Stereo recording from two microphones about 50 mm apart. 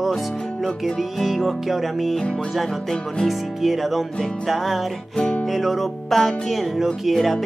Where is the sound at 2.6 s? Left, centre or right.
Centre.